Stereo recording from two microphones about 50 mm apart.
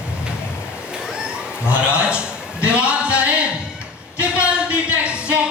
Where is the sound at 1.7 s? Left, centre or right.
Right.